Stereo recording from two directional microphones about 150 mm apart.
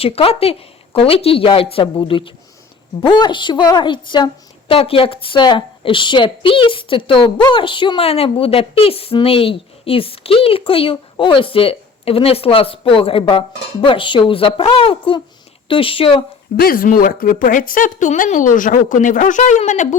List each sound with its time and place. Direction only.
0.0 s a woman's voice: 40° left (ahead or behind)
16.6 s a woman's voice: 75° left (ahead or behind); by 20.0 s 55° left (ahead or behind)